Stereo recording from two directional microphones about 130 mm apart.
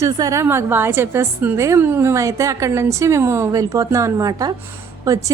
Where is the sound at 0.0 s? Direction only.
25° right (ahead or behind).